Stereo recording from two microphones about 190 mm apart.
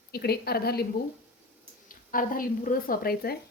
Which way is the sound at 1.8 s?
45° left (ahead or behind).